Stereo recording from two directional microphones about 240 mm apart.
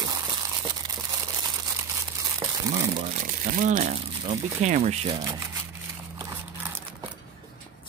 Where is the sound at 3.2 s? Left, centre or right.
Right.